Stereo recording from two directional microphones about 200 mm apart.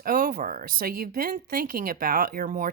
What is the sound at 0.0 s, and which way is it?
Speech, 45° right (ahead or behind).